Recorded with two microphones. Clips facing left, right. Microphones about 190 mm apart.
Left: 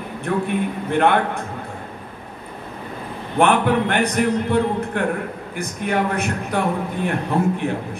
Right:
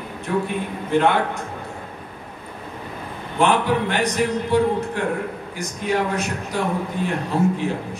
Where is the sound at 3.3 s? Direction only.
55° left (ahead or behind).